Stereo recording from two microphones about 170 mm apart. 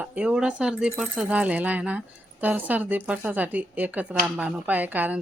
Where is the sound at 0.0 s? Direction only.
10° right (ahead or behind).